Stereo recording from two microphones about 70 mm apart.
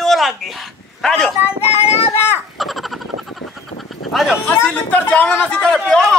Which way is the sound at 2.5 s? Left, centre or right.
Centre.